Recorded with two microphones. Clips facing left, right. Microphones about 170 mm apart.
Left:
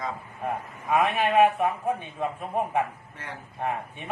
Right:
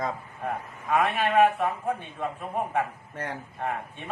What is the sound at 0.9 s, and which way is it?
Speech, 15° left (ahead or behind).